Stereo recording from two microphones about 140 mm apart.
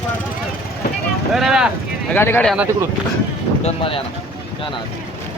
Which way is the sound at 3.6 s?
40° left (ahead or behind).